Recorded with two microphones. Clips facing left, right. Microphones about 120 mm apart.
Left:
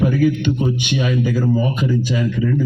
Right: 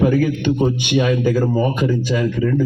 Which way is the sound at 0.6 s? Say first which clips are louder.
Right 3 dB; 45° right (ahead or behind).